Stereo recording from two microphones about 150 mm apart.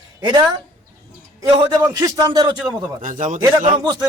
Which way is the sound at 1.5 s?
30° right (ahead or behind).